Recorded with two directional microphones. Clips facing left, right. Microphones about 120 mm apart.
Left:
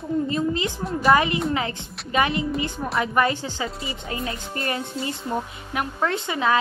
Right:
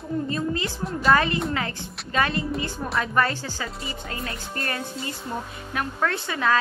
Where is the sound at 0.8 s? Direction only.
Centre (ahead or behind).